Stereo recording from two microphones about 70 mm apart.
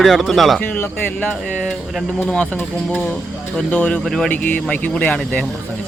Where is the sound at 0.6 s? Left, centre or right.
Left.